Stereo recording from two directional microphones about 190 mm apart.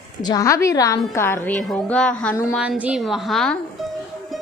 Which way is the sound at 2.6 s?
5° right (ahead or behind).